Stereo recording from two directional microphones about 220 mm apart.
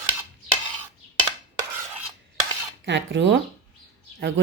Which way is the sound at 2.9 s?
55° right (ahead or behind).